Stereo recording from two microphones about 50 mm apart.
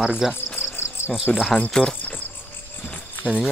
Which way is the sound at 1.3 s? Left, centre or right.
Left.